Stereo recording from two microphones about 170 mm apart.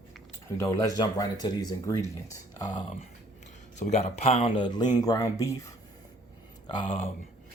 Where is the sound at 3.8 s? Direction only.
40° left (ahead or behind); by 5.7 s 20° left (ahead or behind).